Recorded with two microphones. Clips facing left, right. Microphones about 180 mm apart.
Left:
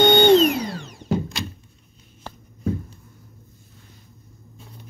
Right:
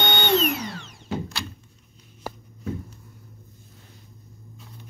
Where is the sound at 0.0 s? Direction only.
35° left (ahead or behind).